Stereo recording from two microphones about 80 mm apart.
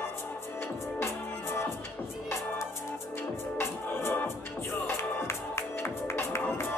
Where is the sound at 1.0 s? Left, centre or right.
Left.